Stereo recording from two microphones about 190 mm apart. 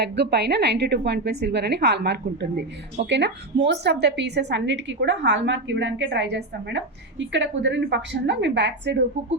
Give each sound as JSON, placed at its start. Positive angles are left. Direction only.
{"t": 0.0, "sound": "a woman's voice", "side_deg": -60}